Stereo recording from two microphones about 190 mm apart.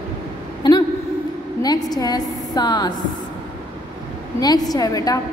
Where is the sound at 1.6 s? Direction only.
20° left (ahead or behind).